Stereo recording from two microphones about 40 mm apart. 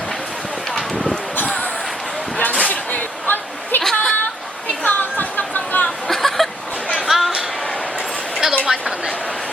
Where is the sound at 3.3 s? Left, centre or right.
Left.